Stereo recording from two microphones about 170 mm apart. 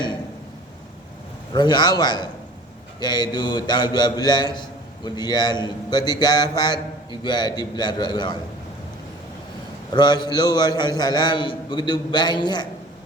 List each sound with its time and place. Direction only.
1.5 s a man's voice: 25° left (ahead or behind)
9.9 s a man's voice: 25° left (ahead or behind)